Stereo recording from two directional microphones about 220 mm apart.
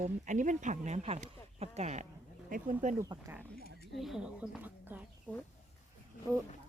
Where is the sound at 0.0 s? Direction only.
35° right (ahead or behind).